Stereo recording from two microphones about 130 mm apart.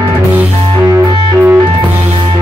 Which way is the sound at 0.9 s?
15° right (ahead or behind).